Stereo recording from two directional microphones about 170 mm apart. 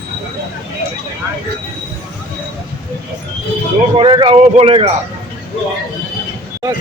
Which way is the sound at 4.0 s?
30° right (ahead or behind).